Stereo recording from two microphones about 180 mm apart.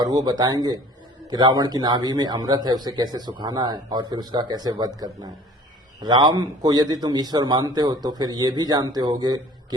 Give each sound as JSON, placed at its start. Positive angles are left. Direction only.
{"t": 0.0, "sound": "a man's voice", "side_deg": -20}